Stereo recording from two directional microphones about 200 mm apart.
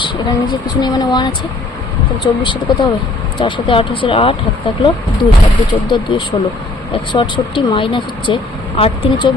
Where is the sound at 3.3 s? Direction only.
25° left (ahead or behind).